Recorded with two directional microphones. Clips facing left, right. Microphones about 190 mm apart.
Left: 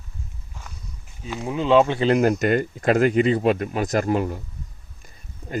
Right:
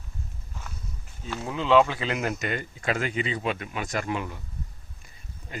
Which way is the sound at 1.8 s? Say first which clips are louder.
Left 9 dB; 30° left (ahead or behind).